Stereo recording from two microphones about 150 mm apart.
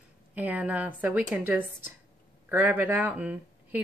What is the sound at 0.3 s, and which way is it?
Speech, 10° right (ahead or behind).